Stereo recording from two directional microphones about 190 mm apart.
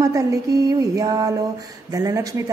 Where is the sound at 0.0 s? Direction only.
15° right (ahead or behind).